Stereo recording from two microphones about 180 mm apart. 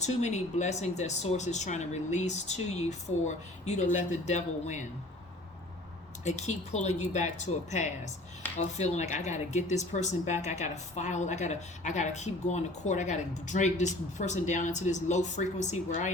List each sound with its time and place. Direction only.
0.0 s speech: 40° left (ahead or behind)
6.2 s speech: 40° left (ahead or behind)